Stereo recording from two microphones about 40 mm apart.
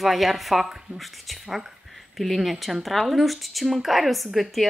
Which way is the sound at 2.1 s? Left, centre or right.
Centre.